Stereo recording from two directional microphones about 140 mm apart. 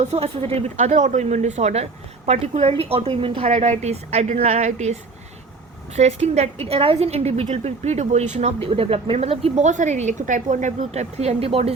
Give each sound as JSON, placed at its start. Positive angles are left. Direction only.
{"t": 0.0, "sound": "a woman's voice", "side_deg": -50}
{"t": 6.0, "sound": "a woman's voice", "side_deg": -50}